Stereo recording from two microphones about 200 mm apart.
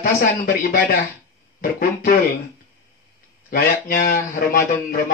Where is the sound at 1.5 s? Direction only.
45° left (ahead or behind).